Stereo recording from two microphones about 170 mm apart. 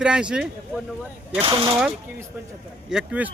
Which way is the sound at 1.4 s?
30° right (ahead or behind).